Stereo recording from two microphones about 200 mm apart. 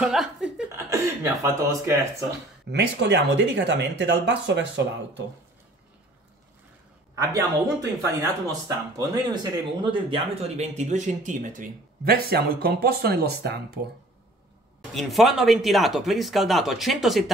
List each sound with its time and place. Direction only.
0.0 s speech: 5° right (ahead or behind)
0.7 s speech: 15° right (ahead or behind)
2.7 s speech: 60° right (ahead or behind)
7.2 s speech: 15° right (ahead or behind); by 13.6 s 55° right (ahead or behind)
15.0 s speech: centre (ahead or behind)